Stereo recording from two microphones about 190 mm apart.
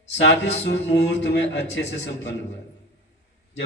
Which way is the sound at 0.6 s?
60° left (ahead or behind).